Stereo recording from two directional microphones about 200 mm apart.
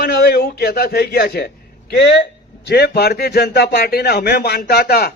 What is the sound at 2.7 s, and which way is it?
Speech, 55° left (ahead or behind).